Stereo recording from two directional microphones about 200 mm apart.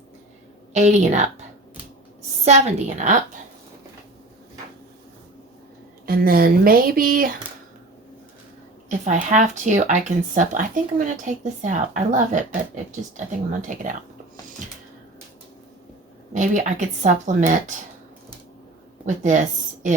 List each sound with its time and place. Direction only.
0.7 s speech: 35° right (ahead or behind)
2.4 s speech: 35° right (ahead or behind)
6.1 s speech: 45° right (ahead or behind)
8.9 s speech: 35° right (ahead or behind)
16.3 s speech: 40° right (ahead or behind)
19.0 s speech: 40° right (ahead or behind)